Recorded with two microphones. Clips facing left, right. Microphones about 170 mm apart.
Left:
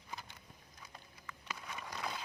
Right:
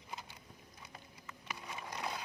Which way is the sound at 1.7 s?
10° right (ahead or behind).